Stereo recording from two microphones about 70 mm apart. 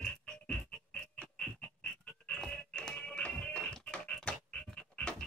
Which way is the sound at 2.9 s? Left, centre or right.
Centre.